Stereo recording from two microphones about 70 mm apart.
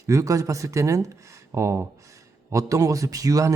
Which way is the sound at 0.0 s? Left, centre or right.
Right.